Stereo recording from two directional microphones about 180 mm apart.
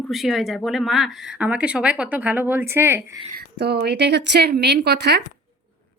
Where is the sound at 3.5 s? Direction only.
65° right (ahead or behind).